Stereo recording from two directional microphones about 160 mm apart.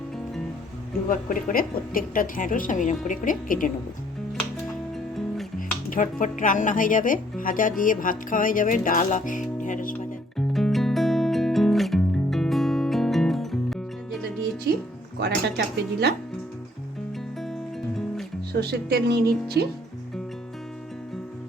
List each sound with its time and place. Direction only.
1.0 s speech: 55° left (ahead or behind)
5.5 s speech: 60° left (ahead or behind)
9.6 s music: 55° left (ahead or behind)
10.3 s music: centre (ahead or behind)
14.7 s music: 90° right
15.2 s speech: 90° right
17.4 s music: centre (ahead or behind)
18.6 s speech: 90° right